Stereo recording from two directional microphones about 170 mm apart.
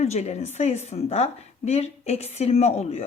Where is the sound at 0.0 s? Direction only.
40° left (ahead or behind).